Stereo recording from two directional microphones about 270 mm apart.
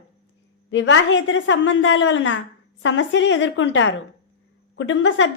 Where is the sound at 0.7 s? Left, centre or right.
Left.